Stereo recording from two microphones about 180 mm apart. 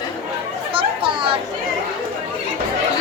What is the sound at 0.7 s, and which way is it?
Chatter, 30° right (ahead or behind).